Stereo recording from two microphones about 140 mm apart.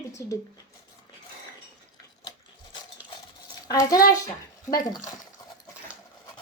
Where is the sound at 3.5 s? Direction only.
30° left (ahead or behind).